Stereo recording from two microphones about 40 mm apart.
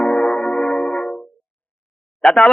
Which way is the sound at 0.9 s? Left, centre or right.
Left.